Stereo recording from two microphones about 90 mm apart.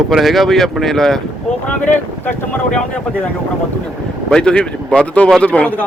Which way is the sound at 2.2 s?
25° left (ahead or behind).